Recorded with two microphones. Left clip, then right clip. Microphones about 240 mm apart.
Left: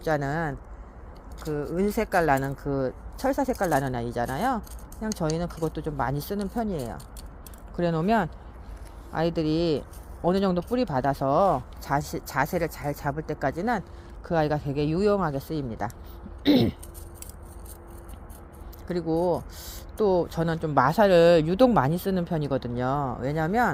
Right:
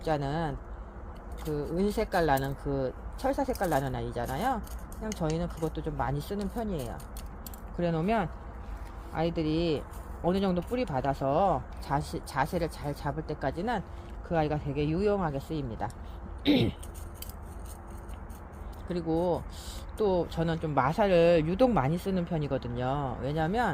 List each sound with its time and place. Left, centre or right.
0.0 s speech: left
1.5 s speech: left
18.9 s speech: left